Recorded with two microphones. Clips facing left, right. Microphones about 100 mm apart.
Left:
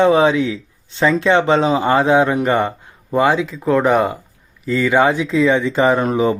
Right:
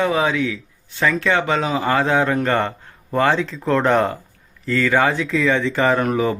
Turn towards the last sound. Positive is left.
turn(degrees=20)  # may be behind; listen again after turning